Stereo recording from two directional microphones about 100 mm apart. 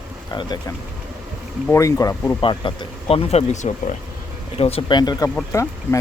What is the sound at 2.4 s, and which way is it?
Speech, 60° left (ahead or behind).